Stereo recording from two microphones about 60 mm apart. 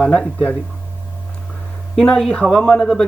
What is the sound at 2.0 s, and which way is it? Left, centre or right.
Speech, centre.